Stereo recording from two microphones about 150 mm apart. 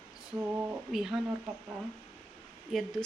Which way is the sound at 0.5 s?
15° right (ahead or behind).